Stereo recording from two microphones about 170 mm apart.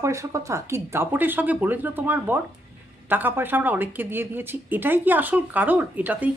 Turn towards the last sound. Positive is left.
turn(degrees=-10)  # may be behind; listen again after turning